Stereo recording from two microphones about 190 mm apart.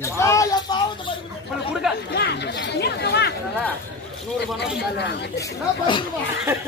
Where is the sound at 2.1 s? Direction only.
60° left (ahead or behind).